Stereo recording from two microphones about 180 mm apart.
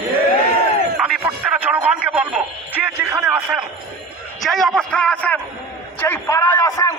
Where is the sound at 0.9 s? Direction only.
5° right (ahead or behind).